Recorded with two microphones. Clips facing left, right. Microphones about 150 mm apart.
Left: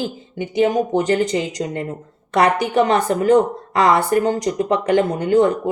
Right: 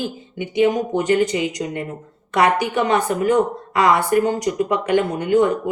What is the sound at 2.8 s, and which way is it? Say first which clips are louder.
Speech: left 5 dB; 35° left (ahead or behind).